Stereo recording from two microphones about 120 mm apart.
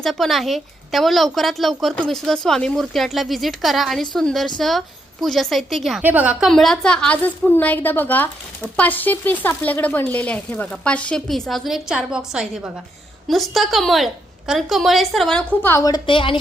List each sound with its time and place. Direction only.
0.0 s a woman's voice: 5° left (ahead or behind)
6.0 s a woman's voice: 15° right (ahead or behind)
6.5 s a woman's voice: 5° left (ahead or behind)
15.6 s a woman's voice: 20° left (ahead or behind)
15.9 s a woman's voice: 45° left (ahead or behind)